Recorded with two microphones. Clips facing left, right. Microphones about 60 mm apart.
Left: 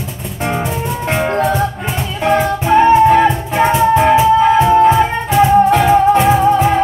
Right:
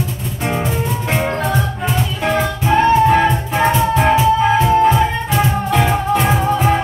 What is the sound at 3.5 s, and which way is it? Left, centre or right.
Music, centre.